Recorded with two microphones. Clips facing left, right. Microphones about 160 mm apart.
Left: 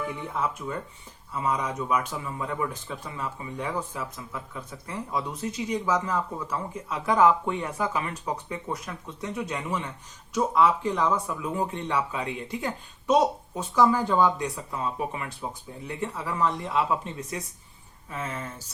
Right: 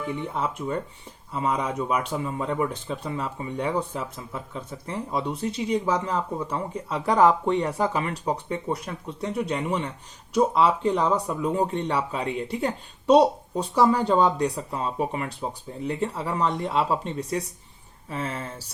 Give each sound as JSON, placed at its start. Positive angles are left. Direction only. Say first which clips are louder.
{"t": 0.3, "sound": "speech", "louder": "right 1 dB", "side_deg": -25}